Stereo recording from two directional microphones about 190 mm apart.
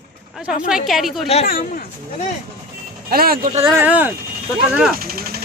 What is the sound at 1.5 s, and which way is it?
Speech, 50° left (ahead or behind).